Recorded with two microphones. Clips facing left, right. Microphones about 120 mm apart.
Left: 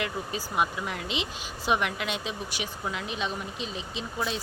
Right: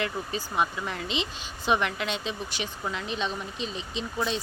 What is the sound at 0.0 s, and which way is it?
Speech, 5° left (ahead or behind).